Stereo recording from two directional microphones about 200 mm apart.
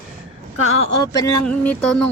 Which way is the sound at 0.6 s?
90° left.